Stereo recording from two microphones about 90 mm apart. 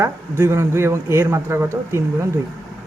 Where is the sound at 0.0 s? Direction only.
30° right (ahead or behind).